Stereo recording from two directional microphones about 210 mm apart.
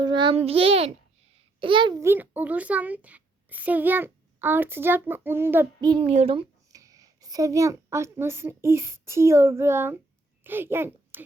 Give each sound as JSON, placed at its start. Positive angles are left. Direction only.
{"t": 0.0, "sound": "a child's voice", "side_deg": -20}
{"t": 5.9, "sound": "a woman's voice", "side_deg": -25}